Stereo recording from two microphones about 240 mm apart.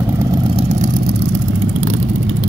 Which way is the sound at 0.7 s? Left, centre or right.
Right.